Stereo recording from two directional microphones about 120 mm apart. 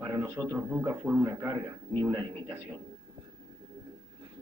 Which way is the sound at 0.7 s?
15° right (ahead or behind).